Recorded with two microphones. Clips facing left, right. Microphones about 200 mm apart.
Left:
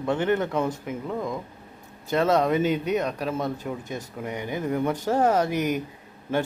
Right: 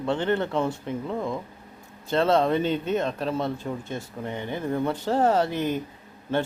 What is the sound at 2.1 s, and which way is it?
Speech, 10° left (ahead or behind).